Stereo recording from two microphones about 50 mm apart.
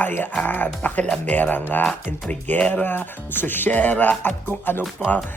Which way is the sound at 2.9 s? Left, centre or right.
Left.